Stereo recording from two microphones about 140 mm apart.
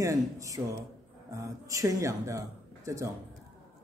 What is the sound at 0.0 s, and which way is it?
Speech, 25° right (ahead or behind).